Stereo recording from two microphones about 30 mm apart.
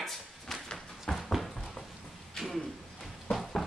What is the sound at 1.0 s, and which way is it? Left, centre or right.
Horse, centre.